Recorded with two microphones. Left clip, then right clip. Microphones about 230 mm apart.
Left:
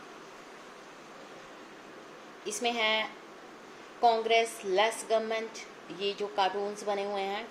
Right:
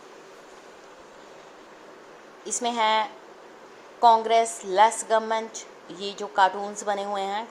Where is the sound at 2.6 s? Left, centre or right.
Centre.